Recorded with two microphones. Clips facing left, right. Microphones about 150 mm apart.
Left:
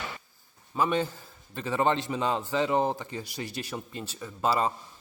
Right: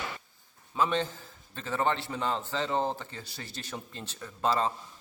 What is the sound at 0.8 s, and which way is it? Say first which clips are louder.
A man's voice: left 2 dB; 10° left (ahead or behind).